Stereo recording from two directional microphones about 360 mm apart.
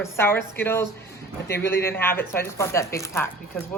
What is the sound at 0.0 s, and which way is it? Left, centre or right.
A woman's voice, centre.